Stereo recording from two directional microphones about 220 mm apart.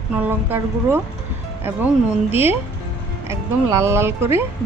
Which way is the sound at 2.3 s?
10° right (ahead or behind).